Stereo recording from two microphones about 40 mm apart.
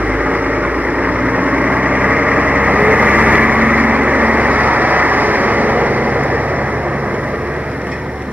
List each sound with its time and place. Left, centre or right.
1.2 s vehicle: right